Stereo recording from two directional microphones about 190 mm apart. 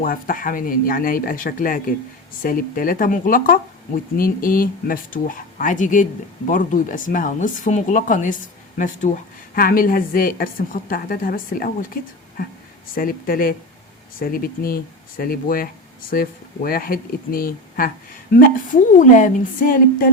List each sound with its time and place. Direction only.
0.0 s speech: 45° left (ahead or behind)
12.9 s speech: 50° left (ahead or behind)